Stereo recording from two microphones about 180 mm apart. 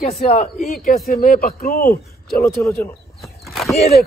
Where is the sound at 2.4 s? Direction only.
15° left (ahead or behind).